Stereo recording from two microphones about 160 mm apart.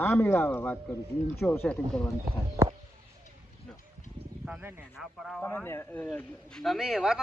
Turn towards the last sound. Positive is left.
turn(degrees=-5)  # may be behind; listen again after turning